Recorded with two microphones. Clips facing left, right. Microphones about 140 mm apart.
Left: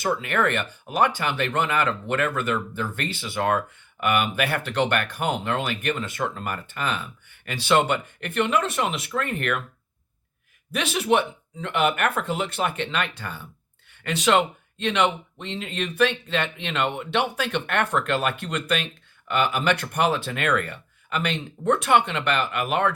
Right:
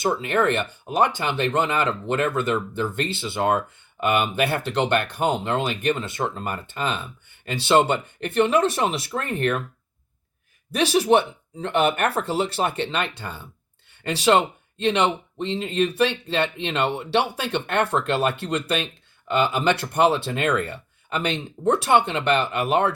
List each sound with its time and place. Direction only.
0.0 s speech: 25° right (ahead or behind)
10.7 s speech: 35° right (ahead or behind)